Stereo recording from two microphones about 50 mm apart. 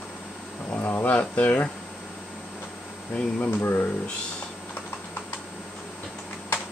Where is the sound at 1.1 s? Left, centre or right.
Left.